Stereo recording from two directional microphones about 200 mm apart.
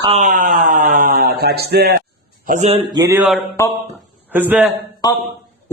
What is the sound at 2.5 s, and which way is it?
Speech, 35° right (ahead or behind).